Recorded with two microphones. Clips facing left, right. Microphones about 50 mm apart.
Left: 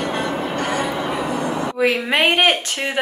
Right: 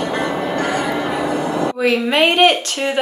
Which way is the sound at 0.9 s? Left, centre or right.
Right.